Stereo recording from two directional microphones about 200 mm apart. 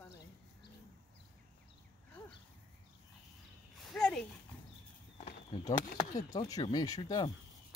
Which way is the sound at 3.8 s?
Centre (ahead or behind).